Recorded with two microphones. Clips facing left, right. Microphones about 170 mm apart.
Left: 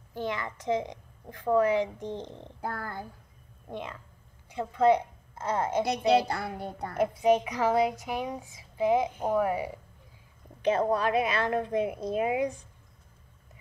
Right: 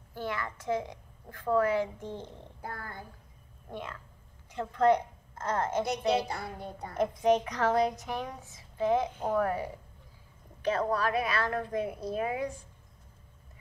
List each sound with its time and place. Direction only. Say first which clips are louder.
0.1 s a woman's voice: left 2 dB; 20° left (ahead or behind)
2.6 s a child's voice: left 6 dB; 70° left (ahead or behind)
3.7 s a woman's voice: left 2 dB; 20° left (ahead or behind)
5.9 s a child's voice: left 4 dB; 70° left (ahead or behind)
7.0 s a woman's voice: left 2 dB; 10° left (ahead or behind)